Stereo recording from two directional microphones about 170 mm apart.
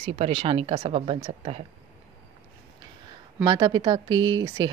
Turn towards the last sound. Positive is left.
turn(degrees=-25)  # may be behind; listen again after turning